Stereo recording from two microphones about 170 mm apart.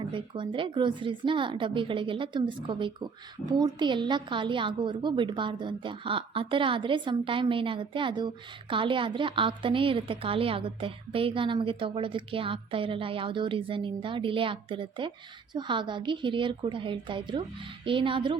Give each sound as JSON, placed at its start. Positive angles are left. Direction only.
{"t": 0.1, "sound": "a woman's voice", "side_deg": -30}